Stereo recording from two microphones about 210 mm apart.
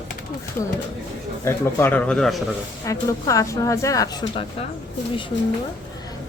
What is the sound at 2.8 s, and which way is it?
Speech, 15° left (ahead or behind).